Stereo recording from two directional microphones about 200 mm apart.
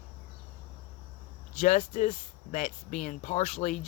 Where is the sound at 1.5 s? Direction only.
40° left (ahead or behind).